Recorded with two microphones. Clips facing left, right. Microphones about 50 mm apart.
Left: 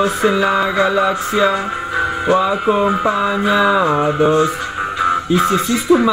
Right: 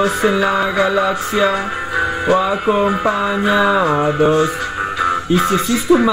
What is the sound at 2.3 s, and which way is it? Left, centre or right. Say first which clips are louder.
Music: left 2 dB; centre.